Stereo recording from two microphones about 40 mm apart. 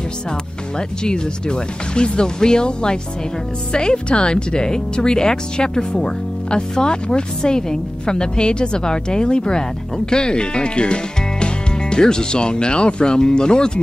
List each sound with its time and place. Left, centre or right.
0.7 s speech: left